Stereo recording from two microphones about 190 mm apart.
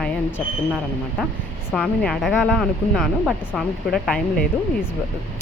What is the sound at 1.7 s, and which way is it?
Speech, centre (ahead or behind).